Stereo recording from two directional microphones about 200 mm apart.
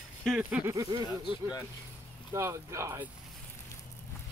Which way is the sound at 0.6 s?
15° right (ahead or behind).